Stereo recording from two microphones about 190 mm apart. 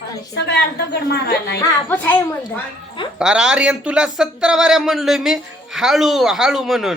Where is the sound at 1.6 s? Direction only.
10° left (ahead or behind).